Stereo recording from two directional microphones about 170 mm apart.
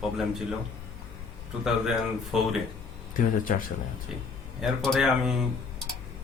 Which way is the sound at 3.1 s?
55° left (ahead or behind).